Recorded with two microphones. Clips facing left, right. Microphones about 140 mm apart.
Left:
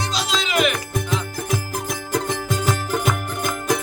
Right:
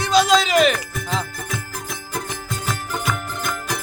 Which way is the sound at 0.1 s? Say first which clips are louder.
Right 13 dB; 50° right (ahead or behind).